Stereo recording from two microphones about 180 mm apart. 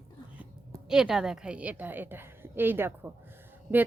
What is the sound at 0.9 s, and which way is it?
Speech, 5° right (ahead or behind).